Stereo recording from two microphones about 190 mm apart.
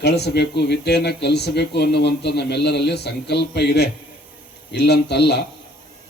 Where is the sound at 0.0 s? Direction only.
60° left (ahead or behind).